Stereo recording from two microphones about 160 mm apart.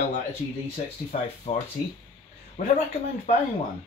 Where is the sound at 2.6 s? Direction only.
50° left (ahead or behind).